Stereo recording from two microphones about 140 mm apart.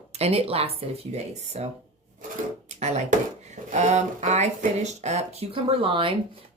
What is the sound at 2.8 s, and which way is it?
Speech, 55° right (ahead or behind).